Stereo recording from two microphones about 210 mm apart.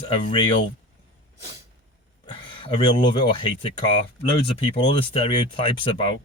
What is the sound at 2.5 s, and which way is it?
Speech, 25° left (ahead or behind).